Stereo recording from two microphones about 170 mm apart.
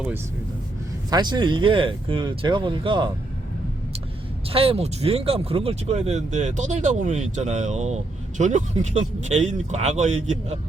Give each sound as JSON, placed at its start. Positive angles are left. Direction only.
{"t": 1.1, "sound": "speech", "side_deg": -25}
{"t": 4.4, "sound": "speech", "side_deg": -35}